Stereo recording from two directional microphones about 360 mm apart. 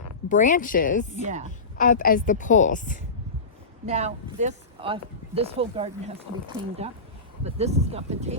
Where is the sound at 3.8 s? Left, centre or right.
Centre.